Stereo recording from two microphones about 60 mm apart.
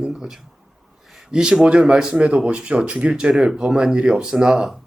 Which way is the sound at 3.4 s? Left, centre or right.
Centre.